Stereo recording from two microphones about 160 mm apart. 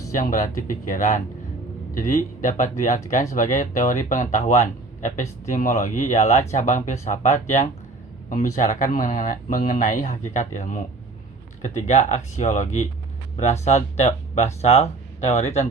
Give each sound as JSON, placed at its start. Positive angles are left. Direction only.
{"t": 0.1, "sound": "speech", "side_deg": 55}